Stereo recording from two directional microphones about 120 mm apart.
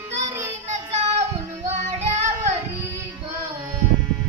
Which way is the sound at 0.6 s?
60° right (ahead or behind).